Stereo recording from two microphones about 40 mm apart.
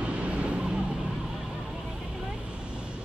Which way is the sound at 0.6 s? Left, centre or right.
Centre.